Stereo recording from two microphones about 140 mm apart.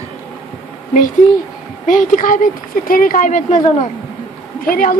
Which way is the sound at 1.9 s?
70° left (ahead or behind).